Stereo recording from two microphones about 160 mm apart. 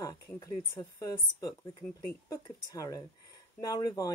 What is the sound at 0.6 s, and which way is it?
Speech, 25° left (ahead or behind).